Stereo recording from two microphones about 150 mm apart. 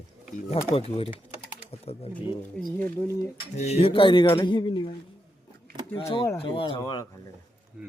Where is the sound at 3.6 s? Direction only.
45° left (ahead or behind).